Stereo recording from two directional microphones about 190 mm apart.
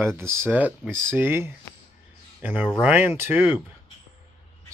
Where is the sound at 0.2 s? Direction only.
15° right (ahead or behind).